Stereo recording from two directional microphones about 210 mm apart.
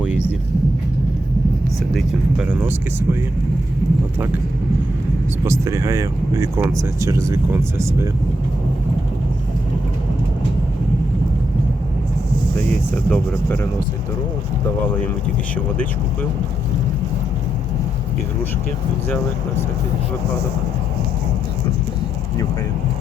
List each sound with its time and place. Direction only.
1.9 s speech: centre (ahead or behind)
5.5 s speech: 15° right (ahead or behind)
13.1 s speech: 10° left (ahead or behind)